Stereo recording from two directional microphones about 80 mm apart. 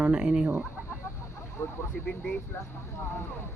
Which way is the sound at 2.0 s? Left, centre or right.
Centre.